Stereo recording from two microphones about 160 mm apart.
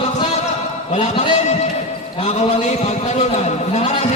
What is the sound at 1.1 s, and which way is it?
A man's voice, 45° left (ahead or behind).